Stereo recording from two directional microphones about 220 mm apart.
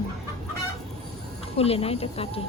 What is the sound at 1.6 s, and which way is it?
Speech, 25° left (ahead or behind).